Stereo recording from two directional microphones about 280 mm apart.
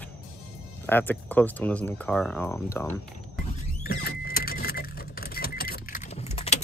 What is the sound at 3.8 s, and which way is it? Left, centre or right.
Vehicle, left.